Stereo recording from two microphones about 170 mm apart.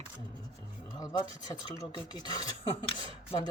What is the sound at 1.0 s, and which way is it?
Speech, 25° left (ahead or behind).